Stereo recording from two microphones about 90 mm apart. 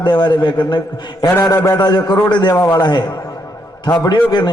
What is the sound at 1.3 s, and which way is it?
A man's voice, 40° left (ahead or behind).